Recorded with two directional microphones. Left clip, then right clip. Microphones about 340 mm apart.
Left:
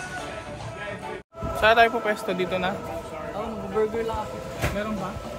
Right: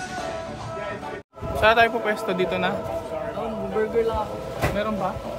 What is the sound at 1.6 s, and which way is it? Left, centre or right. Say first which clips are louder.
Speech: even; centre.